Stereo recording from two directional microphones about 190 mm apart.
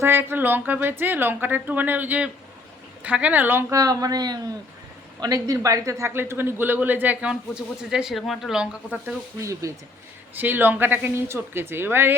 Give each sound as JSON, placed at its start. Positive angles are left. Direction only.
{"t": 0.0, "sound": "speech", "side_deg": -10}